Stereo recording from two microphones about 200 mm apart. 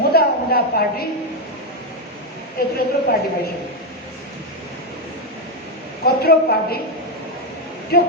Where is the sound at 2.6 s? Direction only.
50° left (ahead or behind).